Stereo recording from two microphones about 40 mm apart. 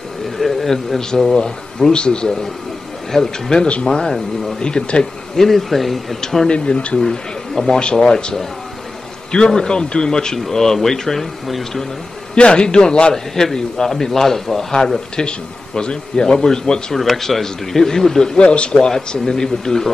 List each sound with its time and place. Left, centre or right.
0.4 s a sound: centre
0.9 s a man's voice: centre
5.3 s speech: centre
6.2 s a man's voice: centre
6.5 s a man's voice: left
7.0 s a man's voice: centre
9.5 s a man's voice: centre
12.4 s a man's voice: left
16.9 s a man's voice: centre
18.4 s a man's voice: left
18.9 s a man's voice: centre